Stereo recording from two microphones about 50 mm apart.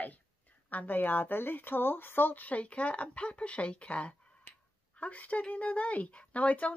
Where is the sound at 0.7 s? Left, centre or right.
Left.